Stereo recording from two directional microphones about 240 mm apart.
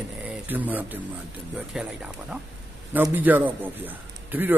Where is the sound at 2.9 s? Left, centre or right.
Centre.